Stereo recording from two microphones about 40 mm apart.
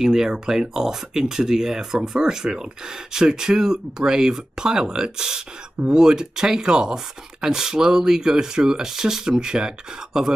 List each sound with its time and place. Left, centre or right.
0.0 s speech: centre